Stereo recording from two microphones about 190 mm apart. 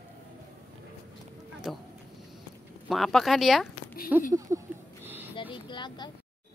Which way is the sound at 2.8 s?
Centre (ahead or behind).